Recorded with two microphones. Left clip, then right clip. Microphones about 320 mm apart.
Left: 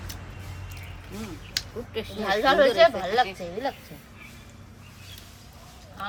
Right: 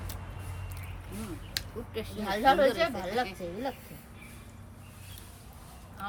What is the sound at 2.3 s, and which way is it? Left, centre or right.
Speech, left.